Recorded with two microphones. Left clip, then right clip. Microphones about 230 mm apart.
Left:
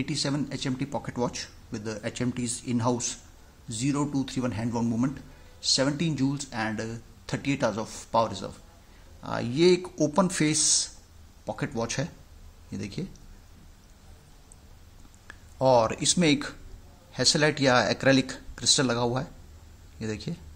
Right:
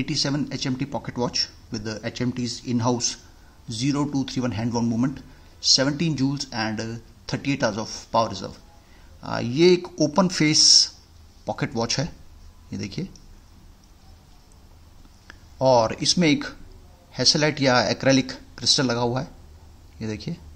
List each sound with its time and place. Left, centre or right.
0.0 s speech: centre
15.2 s speech: centre